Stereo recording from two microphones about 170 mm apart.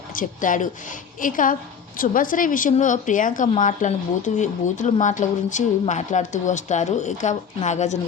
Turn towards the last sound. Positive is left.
turn(degrees=40)  # may be behind; listen again after turning